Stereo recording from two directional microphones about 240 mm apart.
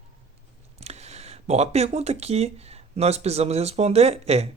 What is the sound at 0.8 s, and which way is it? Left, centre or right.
Speech, right.